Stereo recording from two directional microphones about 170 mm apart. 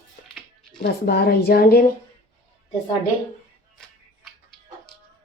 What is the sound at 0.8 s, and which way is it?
A woman's voice, 65° left (ahead or behind).